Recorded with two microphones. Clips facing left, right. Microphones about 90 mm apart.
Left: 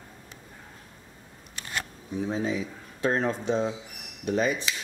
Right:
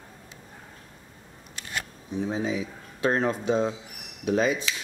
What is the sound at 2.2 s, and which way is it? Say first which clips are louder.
Speech: even; 10° right (ahead or behind).